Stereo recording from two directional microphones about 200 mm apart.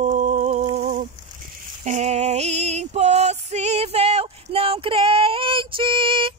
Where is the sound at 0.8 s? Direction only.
40° right (ahead or behind).